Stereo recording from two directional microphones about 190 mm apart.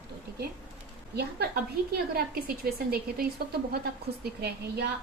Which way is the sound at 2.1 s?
55° right (ahead or behind).